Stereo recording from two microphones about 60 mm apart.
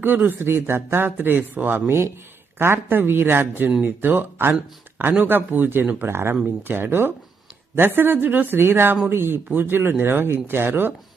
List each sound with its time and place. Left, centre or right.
0.0 s speech: right
6.1 s speech: right